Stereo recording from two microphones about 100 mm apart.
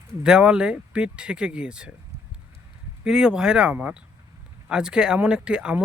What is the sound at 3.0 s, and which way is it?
Speech, 5° right (ahead or behind).